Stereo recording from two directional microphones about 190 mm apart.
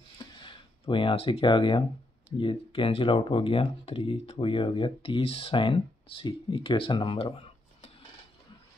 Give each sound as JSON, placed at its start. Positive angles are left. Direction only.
{"t": 0.2, "sound": "speech", "side_deg": 25}